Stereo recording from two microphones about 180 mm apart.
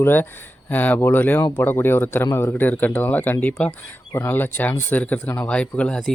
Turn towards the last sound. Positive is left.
turn(degrees=5)  # may be behind; listen again after turning